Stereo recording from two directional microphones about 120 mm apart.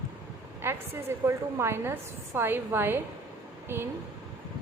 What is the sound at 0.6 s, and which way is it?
A woman's voice, 20° right (ahead or behind).